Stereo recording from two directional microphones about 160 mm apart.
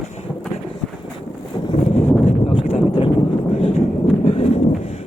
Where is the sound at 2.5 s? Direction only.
30° left (ahead or behind).